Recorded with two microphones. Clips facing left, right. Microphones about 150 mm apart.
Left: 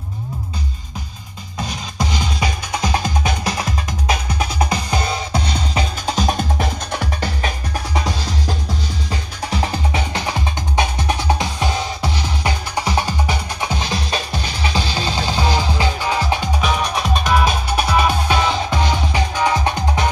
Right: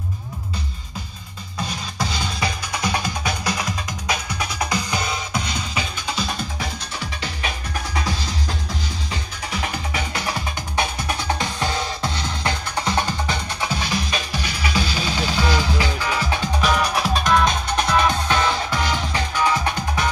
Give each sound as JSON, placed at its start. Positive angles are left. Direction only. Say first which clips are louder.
{"t": 2.0, "sound": "music", "louder": "left 4 dB", "side_deg": 20}
{"t": 9.5, "sound": "music", "louder": "left 5 dB", "side_deg": 30}
{"t": 16.6, "sound": "music", "louder": "right 2 dB", "side_deg": 0}